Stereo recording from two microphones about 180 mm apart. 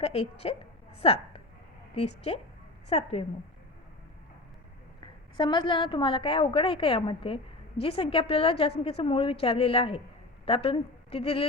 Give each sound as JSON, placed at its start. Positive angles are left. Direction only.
{"t": 0.0, "sound": "a woman's voice", "side_deg": 35}
{"t": 5.4, "sound": "a woman's voice", "side_deg": 25}